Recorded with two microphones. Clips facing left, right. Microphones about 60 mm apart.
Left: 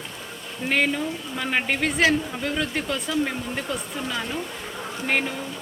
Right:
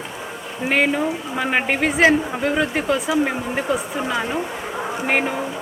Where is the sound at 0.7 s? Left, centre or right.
Centre.